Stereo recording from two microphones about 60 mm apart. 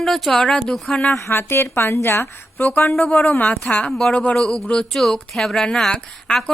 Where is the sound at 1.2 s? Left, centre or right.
Left.